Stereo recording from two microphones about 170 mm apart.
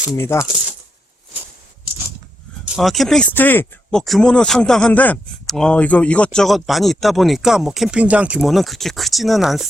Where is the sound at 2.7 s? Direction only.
Centre (ahead or behind).